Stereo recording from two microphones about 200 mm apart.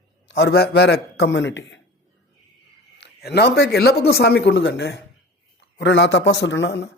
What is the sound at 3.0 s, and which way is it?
Speech, 55° left (ahead or behind).